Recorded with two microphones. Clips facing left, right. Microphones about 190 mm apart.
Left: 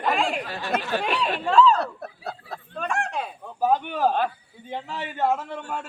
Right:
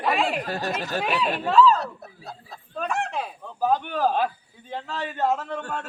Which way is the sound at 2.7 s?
Centre (ahead or behind).